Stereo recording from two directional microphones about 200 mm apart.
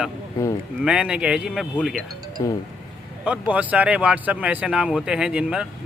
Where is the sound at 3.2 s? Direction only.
5° right (ahead or behind).